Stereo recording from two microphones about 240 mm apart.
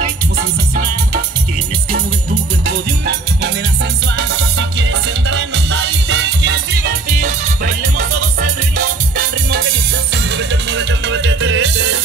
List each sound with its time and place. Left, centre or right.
2.6 s music: right
7.1 s music: right
10.1 s music: right